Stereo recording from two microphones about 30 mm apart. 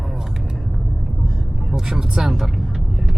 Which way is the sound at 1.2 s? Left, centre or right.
Centre.